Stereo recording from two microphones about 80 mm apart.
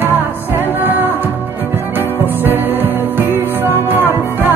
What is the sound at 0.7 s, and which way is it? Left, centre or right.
Music, right.